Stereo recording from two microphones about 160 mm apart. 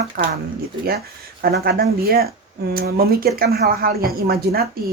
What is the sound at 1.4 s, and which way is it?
Speech, 80° right.